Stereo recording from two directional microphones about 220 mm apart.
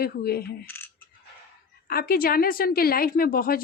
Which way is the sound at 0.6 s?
10° left (ahead or behind).